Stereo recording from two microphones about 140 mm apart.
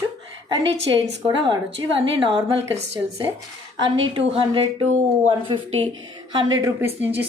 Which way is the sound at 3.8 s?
40° right (ahead or behind).